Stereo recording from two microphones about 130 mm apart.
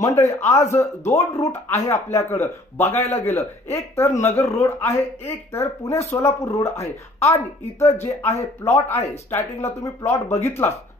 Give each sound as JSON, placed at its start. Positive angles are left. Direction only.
{"t": 0.0, "sound": "a man's voice", "side_deg": 20}